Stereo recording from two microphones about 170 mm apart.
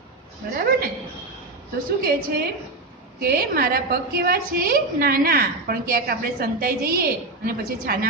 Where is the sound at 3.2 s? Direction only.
60° right (ahead or behind).